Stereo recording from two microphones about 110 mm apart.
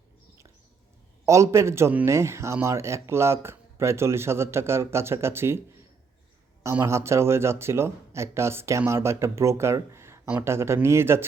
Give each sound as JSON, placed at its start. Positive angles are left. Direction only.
{"t": 1.2, "sound": "speech", "side_deg": -30}
{"t": 6.8, "sound": "speech", "side_deg": -25}